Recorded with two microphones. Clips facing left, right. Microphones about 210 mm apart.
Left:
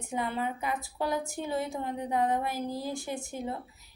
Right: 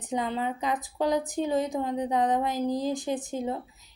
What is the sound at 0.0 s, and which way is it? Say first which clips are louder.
A woman's voice: right 3 dB; 20° right (ahead or behind).